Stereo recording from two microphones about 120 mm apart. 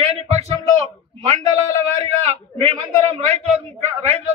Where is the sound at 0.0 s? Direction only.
60° right (ahead or behind).